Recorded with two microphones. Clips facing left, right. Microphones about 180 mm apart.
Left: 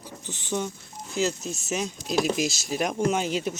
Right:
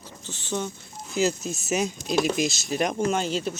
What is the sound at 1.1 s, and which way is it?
Speech, 5° right (ahead or behind).